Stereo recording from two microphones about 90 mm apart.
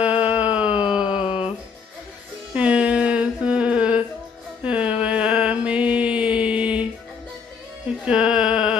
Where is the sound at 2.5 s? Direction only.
15° right (ahead or behind).